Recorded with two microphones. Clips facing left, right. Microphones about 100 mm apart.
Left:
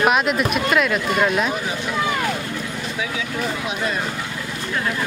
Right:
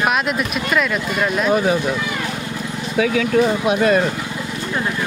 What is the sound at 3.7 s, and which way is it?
Speech, 65° right (ahead or behind).